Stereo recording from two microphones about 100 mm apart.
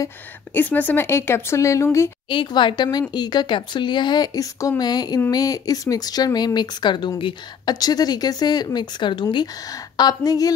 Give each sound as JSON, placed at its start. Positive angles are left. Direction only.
{"t": 0.6, "sound": "speech", "side_deg": 15}
{"t": 2.2, "sound": "a woman's voice", "side_deg": 50}
{"t": 7.8, "sound": "speech", "side_deg": 40}